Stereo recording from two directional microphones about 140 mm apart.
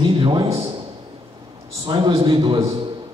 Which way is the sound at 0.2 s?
40° right (ahead or behind).